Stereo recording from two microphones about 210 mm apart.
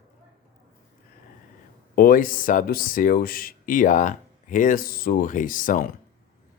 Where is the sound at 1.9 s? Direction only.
45° left (ahead or behind).